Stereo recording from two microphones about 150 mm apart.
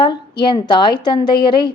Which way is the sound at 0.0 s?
30° left (ahead or behind).